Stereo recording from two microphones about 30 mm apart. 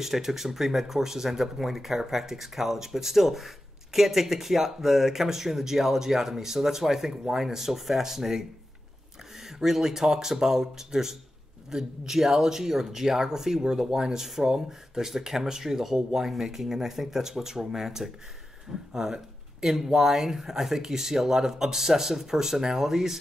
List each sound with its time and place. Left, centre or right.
0.0 s speech: centre